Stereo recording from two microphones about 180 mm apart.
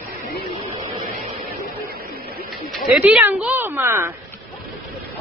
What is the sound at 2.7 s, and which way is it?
Speech, 5° right (ahead or behind).